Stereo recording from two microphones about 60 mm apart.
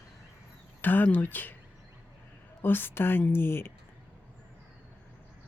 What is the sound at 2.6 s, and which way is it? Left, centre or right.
Speech, left.